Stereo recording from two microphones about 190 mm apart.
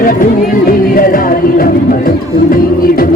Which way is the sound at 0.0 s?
45° left (ahead or behind).